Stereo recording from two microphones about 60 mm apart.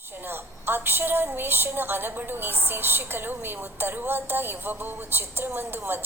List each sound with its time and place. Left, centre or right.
0.3 s a woman's voice: right